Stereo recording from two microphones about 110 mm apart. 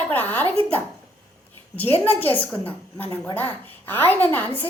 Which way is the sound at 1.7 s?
15° left (ahead or behind).